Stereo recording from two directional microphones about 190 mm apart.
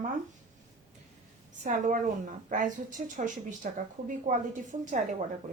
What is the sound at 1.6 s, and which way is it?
A woman's voice, 45° right (ahead or behind).